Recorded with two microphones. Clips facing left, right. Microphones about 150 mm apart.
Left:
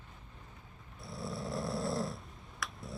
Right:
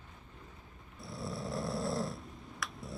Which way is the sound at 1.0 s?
Centre (ahead or behind).